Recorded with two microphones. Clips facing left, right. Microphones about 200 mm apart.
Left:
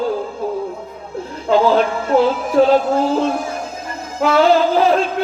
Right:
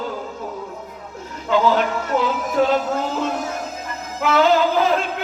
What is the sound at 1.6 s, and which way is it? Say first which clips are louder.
Music: left 4 dB; 30° left (ahead or behind).